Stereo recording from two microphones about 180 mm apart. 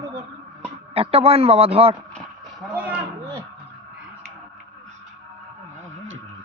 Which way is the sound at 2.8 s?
10° right (ahead or behind).